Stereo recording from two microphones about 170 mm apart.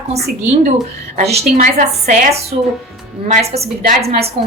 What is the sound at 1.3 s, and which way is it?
Speech, 45° right (ahead or behind).